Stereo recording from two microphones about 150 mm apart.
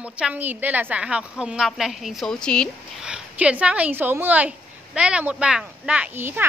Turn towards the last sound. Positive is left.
turn(degrees=-15)  # may be behind; listen again after turning